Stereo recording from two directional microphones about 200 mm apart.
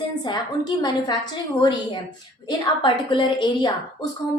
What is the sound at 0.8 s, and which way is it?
A woman's voice, 20° left (ahead or behind).